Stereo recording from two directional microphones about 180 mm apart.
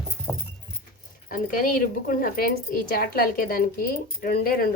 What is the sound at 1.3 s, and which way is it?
Speech, 50° left (ahead or behind).